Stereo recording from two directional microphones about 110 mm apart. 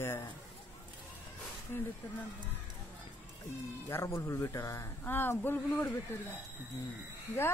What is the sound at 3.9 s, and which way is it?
Speech, 25° left (ahead or behind).